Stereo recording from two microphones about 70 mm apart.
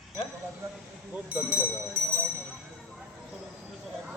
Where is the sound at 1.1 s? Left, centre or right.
Right.